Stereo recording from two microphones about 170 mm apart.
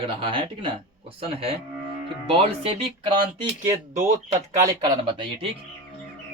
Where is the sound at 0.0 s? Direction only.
30° right (ahead or behind).